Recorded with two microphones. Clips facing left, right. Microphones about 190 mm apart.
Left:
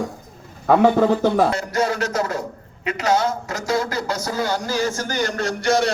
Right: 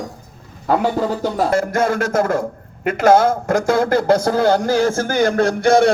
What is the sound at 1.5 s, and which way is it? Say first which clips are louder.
A man's voice: right 5 dB; 50° right (ahead or behind).